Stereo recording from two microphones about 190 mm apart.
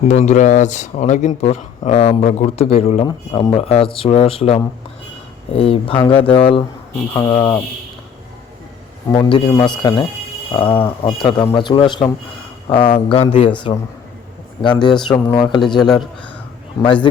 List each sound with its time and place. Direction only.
0.1 s speech: 35° left (ahead or behind); by 7.6 s 15° left (ahead or behind)
9.0 s speech: 25° left (ahead or behind)
14.6 s speech: 25° left (ahead or behind)
15.6 s a man's voice: centre (ahead or behind)
16.8 s speech: 25° left (ahead or behind)